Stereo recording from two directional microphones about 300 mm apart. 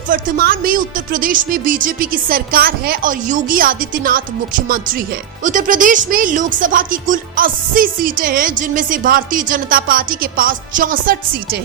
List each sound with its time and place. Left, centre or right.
0.1 s a woman's voice: right